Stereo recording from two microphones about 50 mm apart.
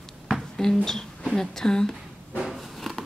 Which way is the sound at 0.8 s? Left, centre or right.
Centre.